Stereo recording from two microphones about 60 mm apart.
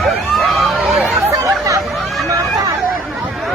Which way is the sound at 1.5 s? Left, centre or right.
Right.